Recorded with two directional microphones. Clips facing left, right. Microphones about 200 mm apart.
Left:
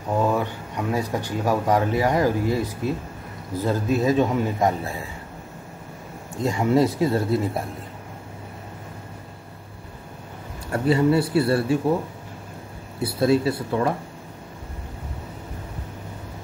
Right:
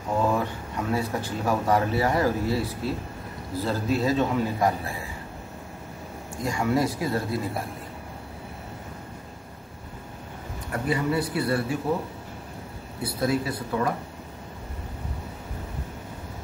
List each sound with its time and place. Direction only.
0.7 s a man's voice: 15° left (ahead or behind)
6.4 s a man's voice: 25° left (ahead or behind)
10.7 s a man's voice: 30° left (ahead or behind)
13.0 s a man's voice: 25° left (ahead or behind)